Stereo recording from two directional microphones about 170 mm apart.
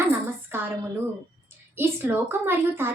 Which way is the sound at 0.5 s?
10° right (ahead or behind).